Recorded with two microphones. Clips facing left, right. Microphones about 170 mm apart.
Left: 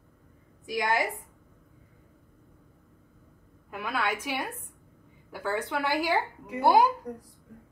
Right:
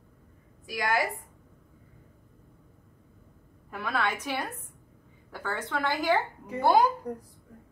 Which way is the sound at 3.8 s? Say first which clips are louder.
Even; 10° left (ahead or behind).